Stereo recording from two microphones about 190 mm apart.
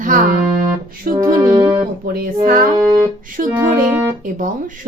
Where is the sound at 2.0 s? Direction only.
50° right (ahead or behind).